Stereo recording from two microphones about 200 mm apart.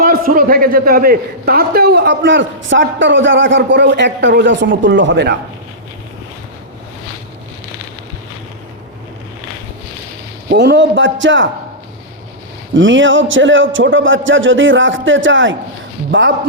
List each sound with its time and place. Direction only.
0.0 s a man's voice: 45° right (ahead or behind)
10.5 s a man's voice: 60° right (ahead or behind)
12.7 s a man's voice: 70° right (ahead or behind)